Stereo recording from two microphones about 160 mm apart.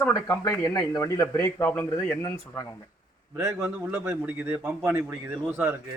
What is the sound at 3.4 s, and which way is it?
A man's voice, 15° right (ahead or behind).